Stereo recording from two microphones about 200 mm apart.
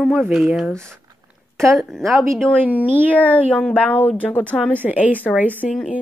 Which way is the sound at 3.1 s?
5° left (ahead or behind).